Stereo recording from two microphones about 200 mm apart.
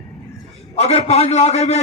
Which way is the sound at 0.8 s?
30° left (ahead or behind).